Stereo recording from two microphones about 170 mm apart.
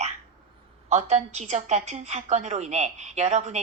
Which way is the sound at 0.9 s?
40° right (ahead or behind).